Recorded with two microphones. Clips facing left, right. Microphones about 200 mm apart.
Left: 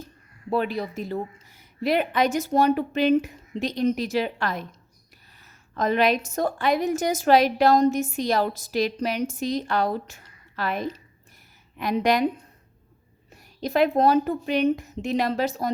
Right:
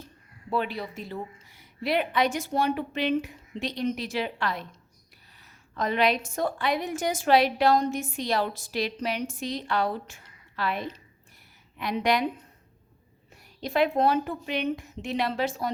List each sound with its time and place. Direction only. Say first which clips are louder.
0.5 s a woman's voice: left 4 dB; 45° left (ahead or behind)
5.7 s a woman's voice: left 3 dB; 45° left (ahead or behind)
13.3 s a woman's voice: left 3 dB; 40° left (ahead or behind)